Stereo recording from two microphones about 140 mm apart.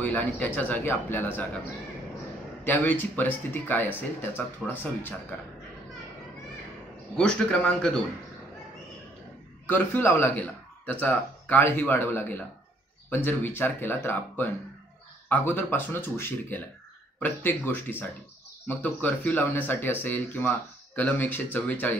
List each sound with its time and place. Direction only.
0.0 s speech: 10° left (ahead or behind)
2.6 s speech: 15° left (ahead or behind)
7.2 s speech: 5° left (ahead or behind)
9.7 s speech: 15° left (ahead or behind)